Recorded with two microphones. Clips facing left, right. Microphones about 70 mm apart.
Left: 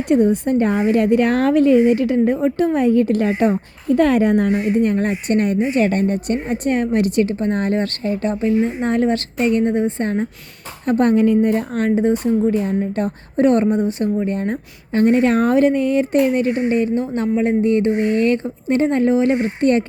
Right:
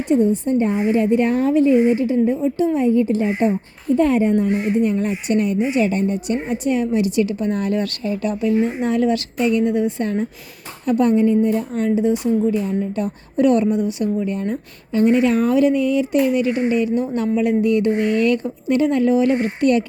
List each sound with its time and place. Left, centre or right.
0.1 s a woman's voice: left
3.5 s a woman's voice: left
4.5 s a woman's voice: left
11.1 s a woman's voice: left